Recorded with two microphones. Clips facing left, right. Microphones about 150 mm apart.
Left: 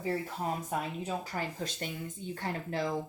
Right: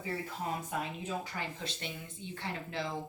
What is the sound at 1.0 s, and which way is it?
A woman's voice, 40° left (ahead or behind).